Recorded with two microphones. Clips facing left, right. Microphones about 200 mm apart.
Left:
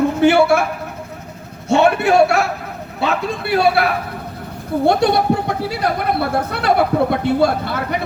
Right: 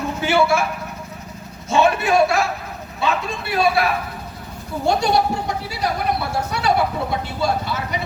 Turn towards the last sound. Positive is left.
turn(degrees=55)  # may be behind; listen again after turning